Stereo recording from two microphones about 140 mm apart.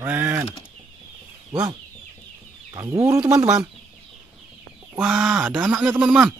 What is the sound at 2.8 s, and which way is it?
Speech, 20° right (ahead or behind).